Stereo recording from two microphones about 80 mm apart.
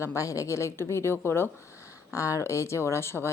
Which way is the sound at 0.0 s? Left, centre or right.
Left.